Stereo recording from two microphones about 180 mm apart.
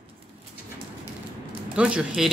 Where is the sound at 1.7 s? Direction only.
5° right (ahead or behind).